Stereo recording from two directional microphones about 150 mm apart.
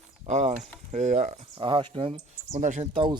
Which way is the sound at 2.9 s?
35° right (ahead or behind).